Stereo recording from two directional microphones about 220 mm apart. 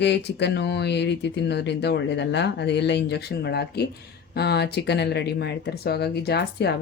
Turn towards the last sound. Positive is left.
turn(degrees=50)  # may be behind; listen again after turning